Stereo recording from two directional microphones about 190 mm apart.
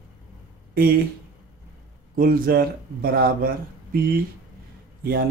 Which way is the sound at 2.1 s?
50° right (ahead or behind).